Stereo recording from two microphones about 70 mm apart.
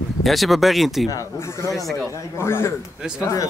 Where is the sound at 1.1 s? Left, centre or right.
Left.